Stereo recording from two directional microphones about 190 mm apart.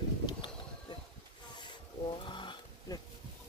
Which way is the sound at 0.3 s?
25° left (ahead or behind).